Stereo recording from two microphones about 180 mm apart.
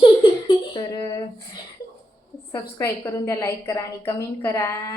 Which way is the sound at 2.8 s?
15° left (ahead or behind).